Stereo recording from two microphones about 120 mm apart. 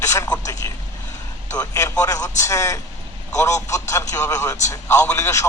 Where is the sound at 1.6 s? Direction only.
25° left (ahead or behind).